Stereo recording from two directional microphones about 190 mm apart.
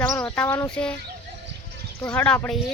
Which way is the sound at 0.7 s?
5° left (ahead or behind).